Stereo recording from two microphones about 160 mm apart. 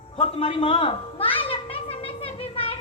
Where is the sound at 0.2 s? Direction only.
35° left (ahead or behind).